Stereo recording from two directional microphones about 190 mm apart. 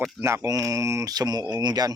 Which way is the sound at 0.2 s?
15° right (ahead or behind).